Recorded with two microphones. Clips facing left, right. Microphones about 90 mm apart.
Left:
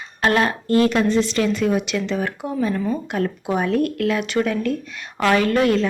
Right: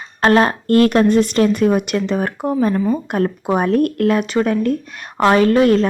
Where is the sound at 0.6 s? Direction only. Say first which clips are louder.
Right 4 dB; 55° right (ahead or behind); by 5.8 s 40° right (ahead or behind).